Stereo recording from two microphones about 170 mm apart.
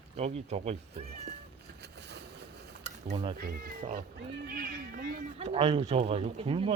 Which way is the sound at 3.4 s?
65° right (ahead or behind).